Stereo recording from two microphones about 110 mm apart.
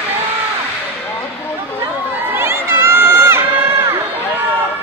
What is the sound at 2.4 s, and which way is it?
Run, 20° right (ahead or behind).